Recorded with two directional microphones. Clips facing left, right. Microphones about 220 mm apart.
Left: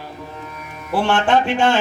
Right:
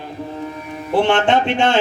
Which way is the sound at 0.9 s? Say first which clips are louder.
Right 2 dB; 20° right (ahead or behind).